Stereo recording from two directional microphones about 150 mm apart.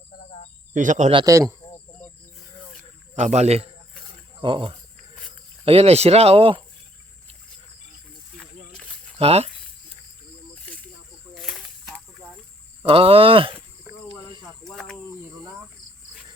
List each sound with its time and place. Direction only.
0.2 s cricket: 50° left (ahead or behind)
0.7 s speech: 55° right (ahead or behind)
1.1 s a man's voice: 20° right (ahead or behind)
3.2 s a man's voice: 50° right (ahead or behind)
4.4 s speech: 35° right (ahead or behind)
8.4 s snake: 5° left (ahead or behind)
9.1 s speech: 40° right (ahead or behind)
11.3 s a sound: centre (ahead or behind)
12.8 s speech: 40° right (ahead or behind)
13.9 s cricket: 20° right (ahead or behind)
14.6 s cricket: 5° left (ahead or behind)